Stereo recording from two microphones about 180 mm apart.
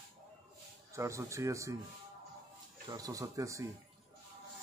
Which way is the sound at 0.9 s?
15° right (ahead or behind).